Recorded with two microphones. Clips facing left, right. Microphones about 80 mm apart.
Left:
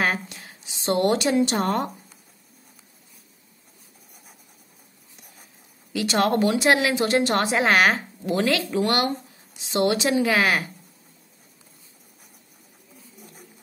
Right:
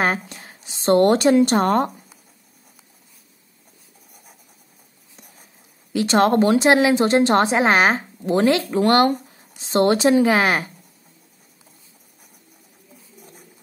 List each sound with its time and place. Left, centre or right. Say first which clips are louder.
0.0 s speech: right 3 dB; right
5.9 s speech: right 5 dB; right
8.6 s speech: right 6 dB; right